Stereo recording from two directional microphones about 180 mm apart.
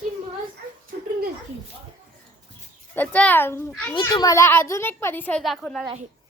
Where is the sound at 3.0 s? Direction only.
10° left (ahead or behind).